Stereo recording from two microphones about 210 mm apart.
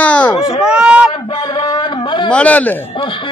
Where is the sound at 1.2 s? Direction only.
20° left (ahead or behind).